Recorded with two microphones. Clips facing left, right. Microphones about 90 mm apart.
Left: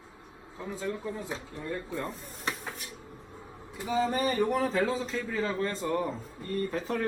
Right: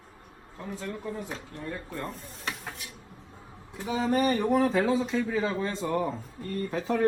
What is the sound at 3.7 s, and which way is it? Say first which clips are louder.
A man's voice: right 2 dB; centre (ahead or behind).